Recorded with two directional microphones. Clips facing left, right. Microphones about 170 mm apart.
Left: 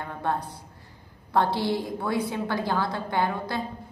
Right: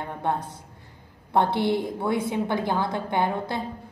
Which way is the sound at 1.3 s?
20° right (ahead or behind).